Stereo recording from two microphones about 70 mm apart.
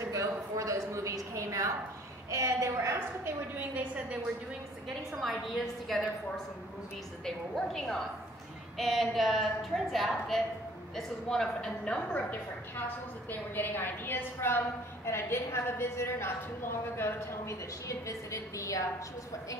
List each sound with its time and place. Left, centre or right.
0.0 s a sound: right
2.3 s a woman's voice: right
3.3 s a woman's voice: right
5.2 s a woman's voice: centre
13.3 s a woman's voice: left